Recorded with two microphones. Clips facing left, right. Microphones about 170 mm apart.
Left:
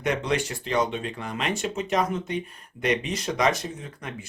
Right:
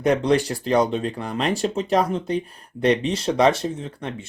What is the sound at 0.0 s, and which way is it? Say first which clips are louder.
Speech: right 7 dB; 35° right (ahead or behind).